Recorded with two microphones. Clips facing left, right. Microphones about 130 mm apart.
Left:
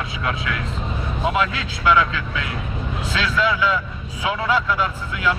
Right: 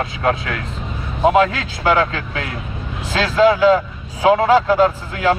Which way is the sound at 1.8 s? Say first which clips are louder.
Right 2 dB; 50° right (ahead or behind).